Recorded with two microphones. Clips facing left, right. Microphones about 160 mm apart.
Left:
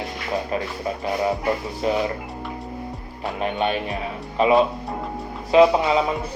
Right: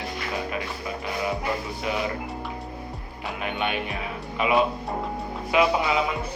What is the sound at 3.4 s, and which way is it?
A man's voice, 35° left (ahead or behind).